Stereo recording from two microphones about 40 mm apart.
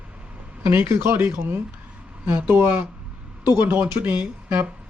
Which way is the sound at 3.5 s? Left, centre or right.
Right.